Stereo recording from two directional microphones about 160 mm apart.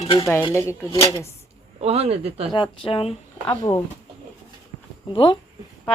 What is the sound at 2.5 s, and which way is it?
Speech, 30° left (ahead or behind).